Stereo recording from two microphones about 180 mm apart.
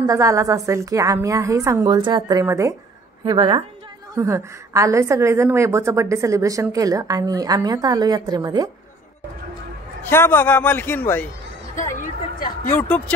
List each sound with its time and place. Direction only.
0.0 s a woman's voice: 20° right (ahead or behind)
3.3 s a woman's voice: 25° right (ahead or behind)
10.0 s a man's voice: 10° left (ahead or behind)
11.7 s a sound: 45° left (ahead or behind)
12.6 s a man's voice: 10° left (ahead or behind)